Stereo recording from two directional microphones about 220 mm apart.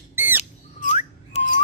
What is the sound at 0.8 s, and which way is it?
Whistling, 30° left (ahead or behind).